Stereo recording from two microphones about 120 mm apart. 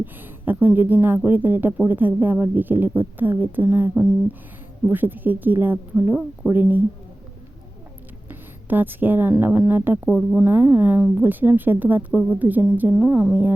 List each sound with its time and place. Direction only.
0.0 s speech: 15° right (ahead or behind)
8.3 s a sound: 15° right (ahead or behind)
9.4 s speech: 15° right (ahead or behind)
10.1 s speech: 5° right (ahead or behind)
10.4 s speech: 15° right (ahead or behind)
12.9 s speech: 5° right (ahead or behind)